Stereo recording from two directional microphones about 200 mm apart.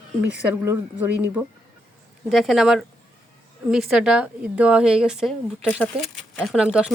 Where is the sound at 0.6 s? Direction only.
10° right (ahead or behind).